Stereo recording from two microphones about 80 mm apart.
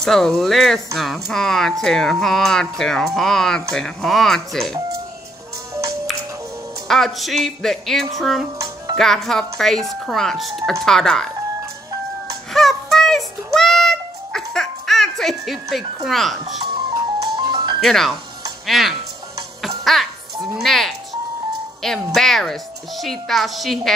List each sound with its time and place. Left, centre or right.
0.0 s speech: centre
6.9 s speech: centre
12.5 s music: centre
16.4 s music: right
17.7 s speech: centre
19.8 s music: centre
21.8 s speech: centre